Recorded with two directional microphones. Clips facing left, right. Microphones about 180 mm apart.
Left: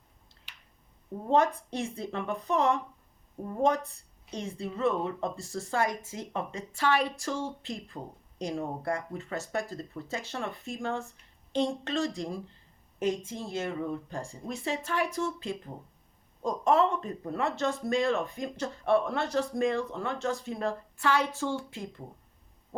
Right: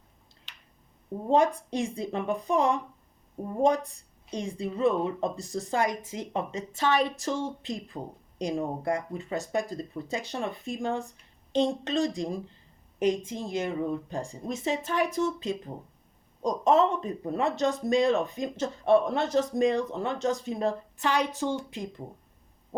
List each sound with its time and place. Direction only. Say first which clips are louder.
0.5 s finger snapping: right 1 dB; 10° left (ahead or behind)
1.3 s a woman's voice: right 2 dB; 15° right (ahead or behind)